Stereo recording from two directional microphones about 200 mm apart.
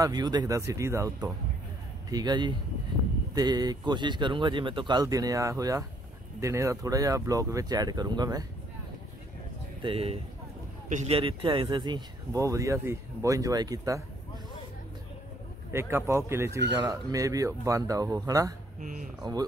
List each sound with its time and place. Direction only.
0.0 s speech: 20° right (ahead or behind)
9.8 s speech: 25° right (ahead or behind)
15.7 s speech: 10° right (ahead or behind)
18.8 s speech: 40° right (ahead or behind)